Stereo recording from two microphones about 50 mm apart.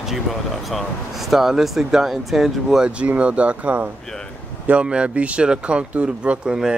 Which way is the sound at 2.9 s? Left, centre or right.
Right.